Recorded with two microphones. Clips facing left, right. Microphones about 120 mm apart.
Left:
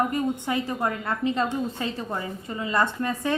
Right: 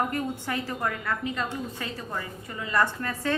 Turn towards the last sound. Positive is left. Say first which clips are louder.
# left 2 dB
turn(degrees=20)  # may be behind; listen again after turning